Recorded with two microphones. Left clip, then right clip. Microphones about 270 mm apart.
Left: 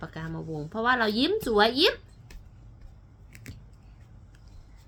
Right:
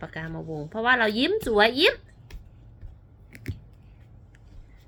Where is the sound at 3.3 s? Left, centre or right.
Centre.